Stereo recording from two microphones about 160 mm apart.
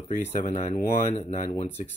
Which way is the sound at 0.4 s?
45° left (ahead or behind).